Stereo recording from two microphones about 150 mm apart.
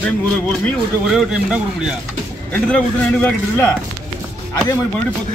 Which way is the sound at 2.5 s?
10° left (ahead or behind).